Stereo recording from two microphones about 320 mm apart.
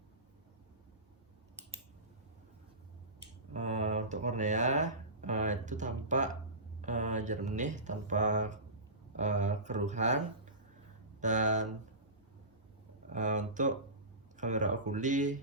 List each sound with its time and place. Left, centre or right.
3.5 s a sound: right
6.8 s speech: right
13.1 s speech: right